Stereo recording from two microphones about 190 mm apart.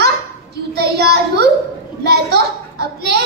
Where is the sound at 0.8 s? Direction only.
60° right (ahead or behind).